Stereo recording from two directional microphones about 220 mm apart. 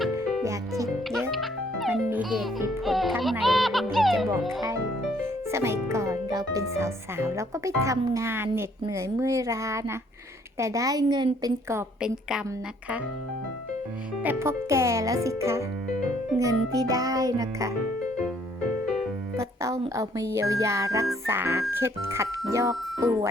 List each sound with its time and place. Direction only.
0.4 s speech: 15° right (ahead or behind)
1.1 s a child's voice: centre (ahead or behind)
5.2 s speech: 10° right (ahead or behind)
14.3 s speech: 10° right (ahead or behind)
19.4 s music: 15° right (ahead or behind)
19.8 s speech: 15° right (ahead or behind)